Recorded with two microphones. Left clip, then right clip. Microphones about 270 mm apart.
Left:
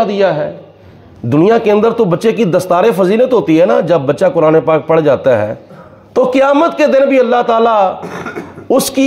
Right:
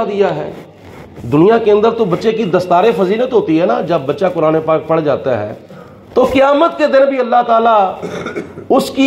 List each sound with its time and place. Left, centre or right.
0.0 s a man's voice: left
8.0 s speech: centre
8.6 s speech: left